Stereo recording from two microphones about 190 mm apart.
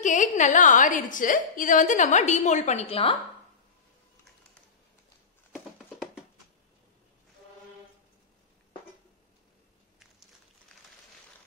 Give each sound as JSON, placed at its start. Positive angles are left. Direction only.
{"t": 0.0, "sound": "a woman's voice", "side_deg": 40}